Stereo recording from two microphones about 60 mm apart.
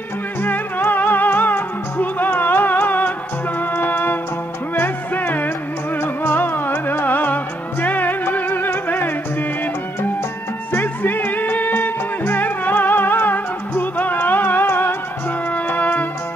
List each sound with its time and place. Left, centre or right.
0.4 s music: left
10.7 s music: left